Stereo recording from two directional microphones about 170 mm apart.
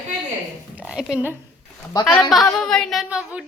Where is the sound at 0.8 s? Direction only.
5° right (ahead or behind).